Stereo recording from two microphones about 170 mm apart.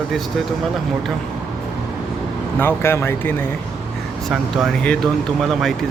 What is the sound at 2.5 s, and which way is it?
Speech, 15° left (ahead or behind).